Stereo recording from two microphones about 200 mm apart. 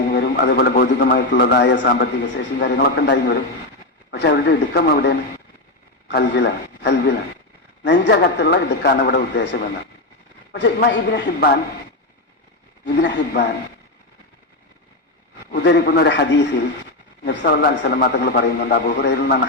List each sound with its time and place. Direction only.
0.1 s a man's voice: 55° left (ahead or behind)
12.8 s a man's voice: 60° left (ahead or behind)
15.5 s a man's voice: 55° left (ahead or behind)